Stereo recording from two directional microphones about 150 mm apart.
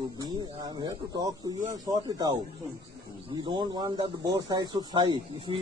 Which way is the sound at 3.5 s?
30° right (ahead or behind).